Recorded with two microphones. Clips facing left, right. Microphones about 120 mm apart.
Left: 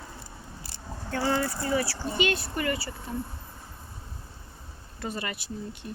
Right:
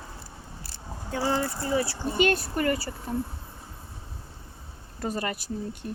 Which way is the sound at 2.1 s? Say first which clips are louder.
Right 4 dB; 45° right (ahead or behind).